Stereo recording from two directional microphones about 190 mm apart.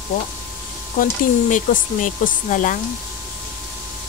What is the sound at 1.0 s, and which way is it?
A woman's voice, 45° left (ahead or behind).